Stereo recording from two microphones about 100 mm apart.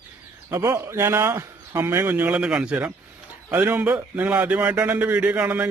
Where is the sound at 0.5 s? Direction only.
30° right (ahead or behind).